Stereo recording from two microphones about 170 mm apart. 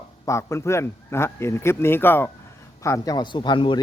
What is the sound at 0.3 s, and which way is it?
A man's voice, 15° left (ahead or behind).